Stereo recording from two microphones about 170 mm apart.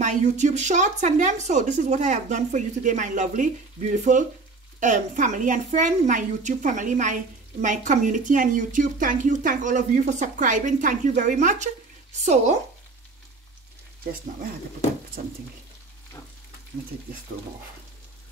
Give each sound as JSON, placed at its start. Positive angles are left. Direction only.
{"t": 0.0, "sound": "a woman's voice", "side_deg": -45}